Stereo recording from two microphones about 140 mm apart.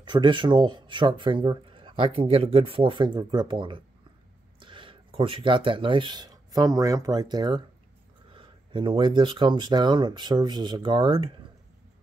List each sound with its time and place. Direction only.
0.0 s speech: 35° right (ahead or behind)